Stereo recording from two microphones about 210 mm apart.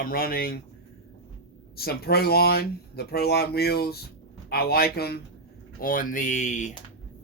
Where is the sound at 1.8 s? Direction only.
50° left (ahead or behind).